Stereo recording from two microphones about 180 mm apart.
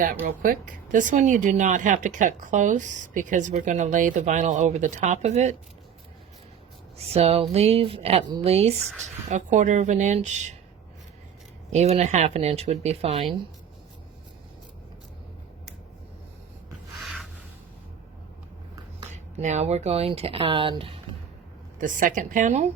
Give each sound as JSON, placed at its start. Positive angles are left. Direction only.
{"t": 0.3, "sound": "speech", "side_deg": -50}
{"t": 7.1, "sound": "speech", "side_deg": -35}
{"t": 11.7, "sound": "speech", "side_deg": -40}
{"t": 17.0, "sound": "rub", "side_deg": 0}
{"t": 19.4, "sound": "speech", "side_deg": -40}
{"t": 21.8, "sound": "speech", "side_deg": -45}